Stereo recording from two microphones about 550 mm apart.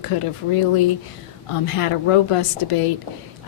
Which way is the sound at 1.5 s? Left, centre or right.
Left.